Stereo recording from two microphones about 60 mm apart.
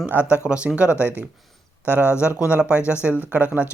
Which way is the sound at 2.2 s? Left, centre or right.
Right.